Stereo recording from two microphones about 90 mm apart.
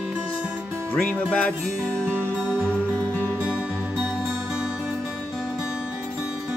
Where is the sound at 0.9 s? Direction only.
20° left (ahead or behind).